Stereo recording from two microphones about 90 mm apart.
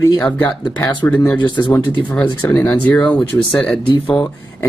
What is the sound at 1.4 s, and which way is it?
Speech, 55° left (ahead or behind).